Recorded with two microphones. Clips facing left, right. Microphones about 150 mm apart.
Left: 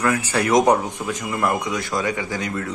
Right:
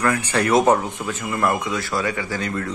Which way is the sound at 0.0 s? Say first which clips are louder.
Even; 10° left (ahead or behind).